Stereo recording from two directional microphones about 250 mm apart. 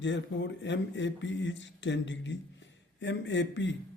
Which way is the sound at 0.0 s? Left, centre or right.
Left.